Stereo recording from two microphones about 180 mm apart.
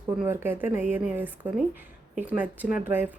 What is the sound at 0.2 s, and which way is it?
Speech, 10° right (ahead or behind).